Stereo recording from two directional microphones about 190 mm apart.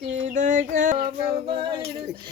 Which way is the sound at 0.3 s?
45° right (ahead or behind).